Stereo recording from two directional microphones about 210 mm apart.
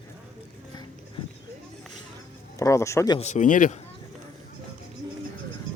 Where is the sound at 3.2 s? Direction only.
35° left (ahead or behind).